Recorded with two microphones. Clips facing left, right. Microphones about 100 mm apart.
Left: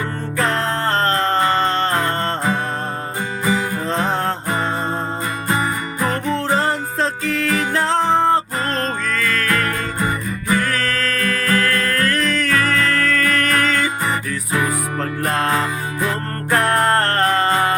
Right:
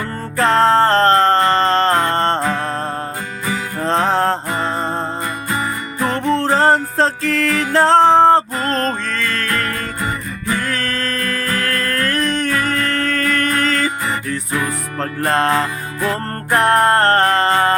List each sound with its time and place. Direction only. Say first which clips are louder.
0.3 s music: right 8 dB; 35° right (ahead or behind)
3.8 s music: right 7 dB; 35° right (ahead or behind)
6.3 s music: right 9 dB; 35° right (ahead or behind)
9.5 s music: left 1 dB; 30° left (ahead or behind)
10.8 s music: left 1 dB; 30° right (ahead or behind)
14.9 s music: right 7 dB; 35° right (ahead or behind)